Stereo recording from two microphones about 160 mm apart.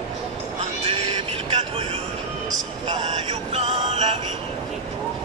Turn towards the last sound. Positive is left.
turn(degrees=-40)  # may be behind; listen again after turning